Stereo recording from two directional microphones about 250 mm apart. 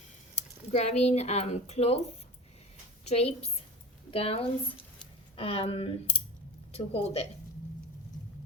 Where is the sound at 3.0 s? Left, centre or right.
Left.